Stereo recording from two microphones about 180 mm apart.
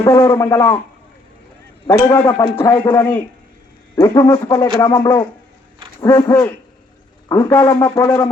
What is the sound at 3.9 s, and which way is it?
Speech, 15° left (ahead or behind).